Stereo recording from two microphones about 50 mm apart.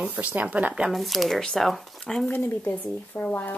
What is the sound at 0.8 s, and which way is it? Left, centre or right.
Speech, centre.